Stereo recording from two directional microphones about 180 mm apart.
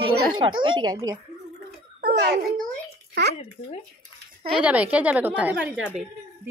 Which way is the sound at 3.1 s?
65° right (ahead or behind).